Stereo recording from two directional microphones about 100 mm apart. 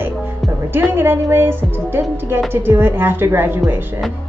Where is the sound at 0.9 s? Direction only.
25° right (ahead or behind).